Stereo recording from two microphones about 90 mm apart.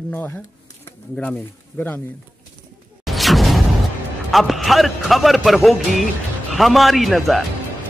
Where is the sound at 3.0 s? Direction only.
Centre (ahead or behind).